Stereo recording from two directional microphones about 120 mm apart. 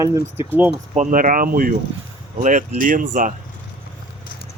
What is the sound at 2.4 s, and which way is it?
Speech, 90° right.